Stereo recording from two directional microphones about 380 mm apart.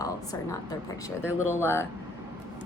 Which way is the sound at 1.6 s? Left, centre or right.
Centre.